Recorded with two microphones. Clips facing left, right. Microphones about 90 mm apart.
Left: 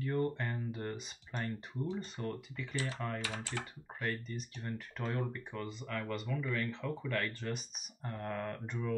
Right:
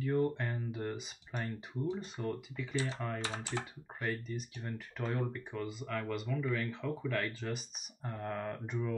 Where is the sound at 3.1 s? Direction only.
25° right (ahead or behind).